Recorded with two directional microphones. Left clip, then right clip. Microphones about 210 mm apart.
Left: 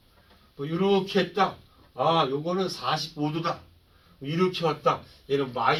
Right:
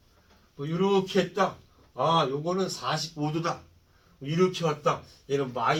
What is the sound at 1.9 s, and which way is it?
Speech, 15° right (ahead or behind).